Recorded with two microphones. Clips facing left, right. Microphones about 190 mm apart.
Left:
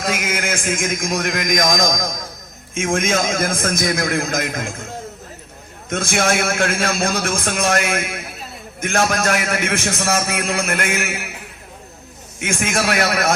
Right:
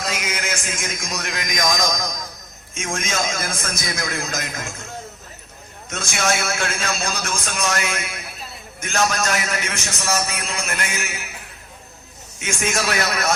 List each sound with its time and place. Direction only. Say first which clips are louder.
0.0 s a man's voice: left 5 dB; 50° left (ahead or behind)
5.9 s a man's voice: left 5 dB; 55° left (ahead or behind)
12.4 s a man's voice: left 3 dB; 55° left (ahead or behind)